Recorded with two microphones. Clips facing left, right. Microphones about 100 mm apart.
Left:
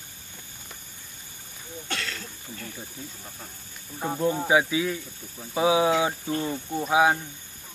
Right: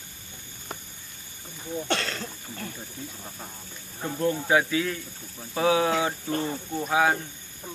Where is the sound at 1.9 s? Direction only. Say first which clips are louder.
Right 3 dB; 35° right (ahead or behind).